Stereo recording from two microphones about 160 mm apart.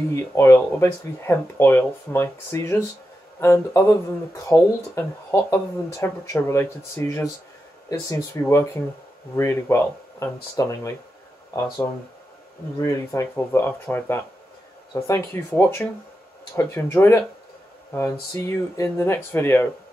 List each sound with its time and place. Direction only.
0.1 s speech: 15° left (ahead or behind)
12.8 s speech: 20° left (ahead or behind)